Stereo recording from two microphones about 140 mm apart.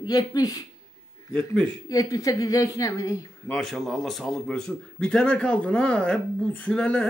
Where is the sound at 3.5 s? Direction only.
Centre (ahead or behind).